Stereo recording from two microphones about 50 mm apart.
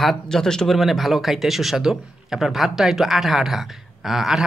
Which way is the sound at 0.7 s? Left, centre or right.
Centre.